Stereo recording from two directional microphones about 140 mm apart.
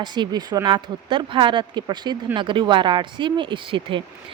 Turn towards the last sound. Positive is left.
turn(degrees=-40)  # may be behind; listen again after turning